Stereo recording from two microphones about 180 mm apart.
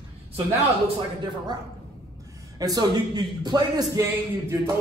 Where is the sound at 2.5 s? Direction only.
20° right (ahead or behind).